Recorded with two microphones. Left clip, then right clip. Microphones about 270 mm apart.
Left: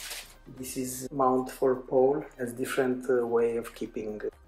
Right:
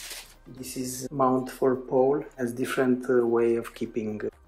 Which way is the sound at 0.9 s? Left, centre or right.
Right.